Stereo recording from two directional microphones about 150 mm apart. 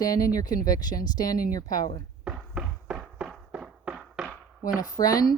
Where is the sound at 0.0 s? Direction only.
25° left (ahead or behind).